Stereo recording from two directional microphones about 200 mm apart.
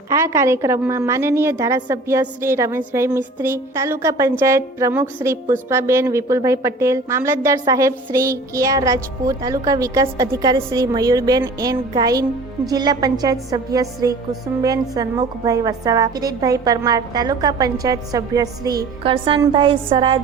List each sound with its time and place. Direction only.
0.1 s a woman's voice: 15° right (ahead or behind)